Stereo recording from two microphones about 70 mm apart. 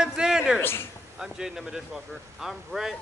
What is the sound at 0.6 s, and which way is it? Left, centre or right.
Speech, left.